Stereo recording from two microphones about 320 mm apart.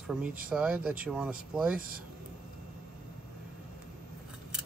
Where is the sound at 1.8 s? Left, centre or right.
Right.